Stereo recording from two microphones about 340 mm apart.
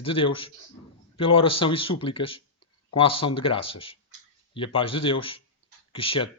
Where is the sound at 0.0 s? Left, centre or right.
Centre.